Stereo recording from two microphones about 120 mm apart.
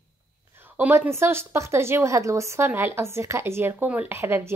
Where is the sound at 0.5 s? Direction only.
15° right (ahead or behind).